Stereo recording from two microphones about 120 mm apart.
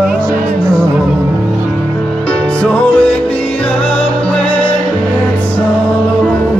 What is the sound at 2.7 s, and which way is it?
Music, 10° left (ahead or behind).